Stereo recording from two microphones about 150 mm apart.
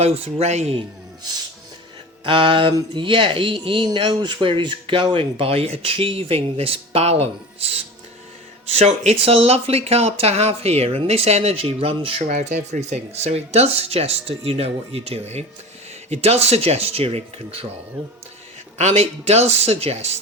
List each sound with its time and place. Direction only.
0.0 s speech: 45° right (ahead or behind)
2.2 s speech: 35° right (ahead or behind)
12.2 s speech: 55° right (ahead or behind)
18.8 s speech: 45° right (ahead or behind)